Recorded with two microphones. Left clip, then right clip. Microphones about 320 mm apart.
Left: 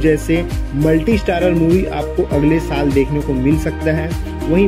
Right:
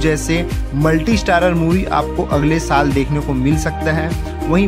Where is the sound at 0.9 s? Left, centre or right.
Right.